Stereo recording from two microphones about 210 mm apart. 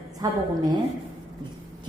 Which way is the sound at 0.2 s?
20° right (ahead or behind).